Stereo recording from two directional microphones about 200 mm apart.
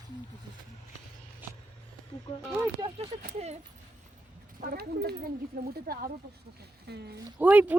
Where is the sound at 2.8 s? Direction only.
25° right (ahead or behind).